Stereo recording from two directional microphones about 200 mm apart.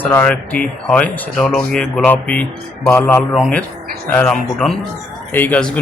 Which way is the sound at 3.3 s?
Centre (ahead or behind).